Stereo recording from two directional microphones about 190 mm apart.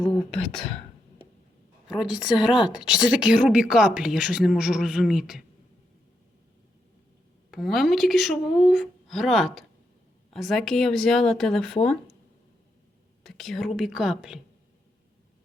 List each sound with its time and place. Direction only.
0.0 s a woman's voice: 5° left (ahead or behind)
1.9 s a woman's voice: 5° right (ahead or behind)
7.5 s a woman's voice: centre (ahead or behind)
13.2 s a woman's voice: centre (ahead or behind)